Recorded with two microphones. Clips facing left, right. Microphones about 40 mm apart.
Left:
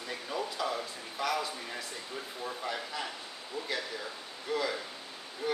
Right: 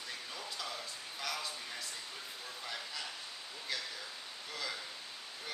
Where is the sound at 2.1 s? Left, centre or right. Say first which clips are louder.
Left 8 dB; left.